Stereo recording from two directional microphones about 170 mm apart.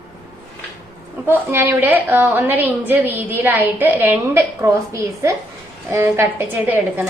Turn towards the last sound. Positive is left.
turn(degrees=-10)  # may be behind; listen again after turning